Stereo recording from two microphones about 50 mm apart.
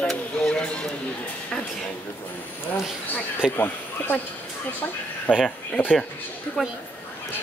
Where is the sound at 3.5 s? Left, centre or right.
Left.